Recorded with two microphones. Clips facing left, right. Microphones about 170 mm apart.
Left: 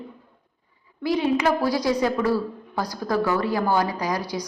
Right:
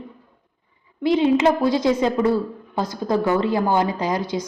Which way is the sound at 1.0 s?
25° right (ahead or behind).